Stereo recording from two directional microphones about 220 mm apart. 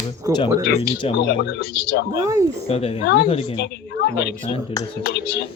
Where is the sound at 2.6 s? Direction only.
25° left (ahead or behind).